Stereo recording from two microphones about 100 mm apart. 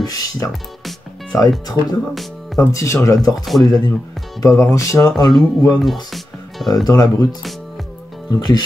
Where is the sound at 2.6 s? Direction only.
30° left (ahead or behind).